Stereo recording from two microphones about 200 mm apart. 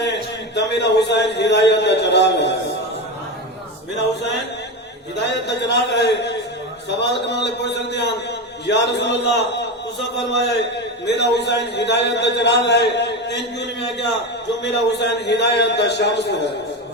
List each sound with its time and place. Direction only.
0.0 s a man's voice: 60° left (ahead or behind)
5.1 s a man's voice: 60° left (ahead or behind)